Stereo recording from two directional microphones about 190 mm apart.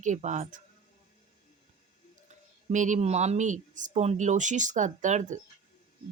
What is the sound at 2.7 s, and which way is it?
Speech, 40° right (ahead or behind).